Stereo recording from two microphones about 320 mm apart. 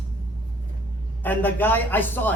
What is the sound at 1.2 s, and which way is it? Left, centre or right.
A man's voice, centre.